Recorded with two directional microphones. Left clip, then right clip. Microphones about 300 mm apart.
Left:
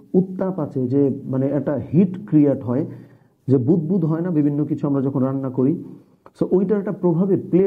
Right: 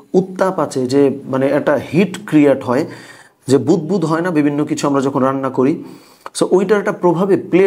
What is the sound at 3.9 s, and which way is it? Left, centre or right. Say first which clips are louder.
Speech: right 6 dB; centre.